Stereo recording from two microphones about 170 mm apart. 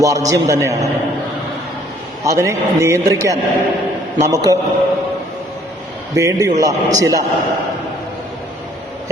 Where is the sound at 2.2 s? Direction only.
20° right (ahead or behind).